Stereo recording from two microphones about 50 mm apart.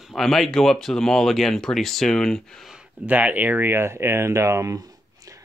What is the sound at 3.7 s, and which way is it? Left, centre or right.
Speech, right.